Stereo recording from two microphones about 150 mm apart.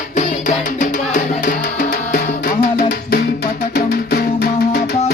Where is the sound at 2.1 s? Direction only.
75° left (ahead or behind).